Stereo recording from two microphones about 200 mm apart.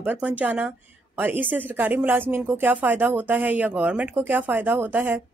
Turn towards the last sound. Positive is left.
turn(degrees=-10)  # may be behind; listen again after turning